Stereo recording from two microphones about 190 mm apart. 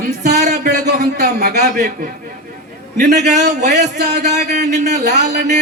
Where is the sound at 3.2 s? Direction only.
40° right (ahead or behind).